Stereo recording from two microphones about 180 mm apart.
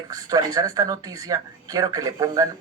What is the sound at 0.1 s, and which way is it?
Speech, 20° right (ahead or behind).